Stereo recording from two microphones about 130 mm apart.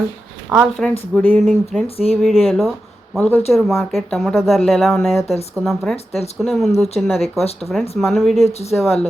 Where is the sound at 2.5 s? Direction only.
Centre (ahead or behind).